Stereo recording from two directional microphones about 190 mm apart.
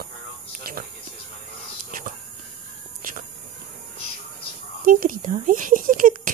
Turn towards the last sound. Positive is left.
turn(degrees=-45)  # may be behind; listen again after turning